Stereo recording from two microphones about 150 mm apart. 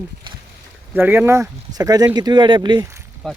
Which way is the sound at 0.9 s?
15° right (ahead or behind).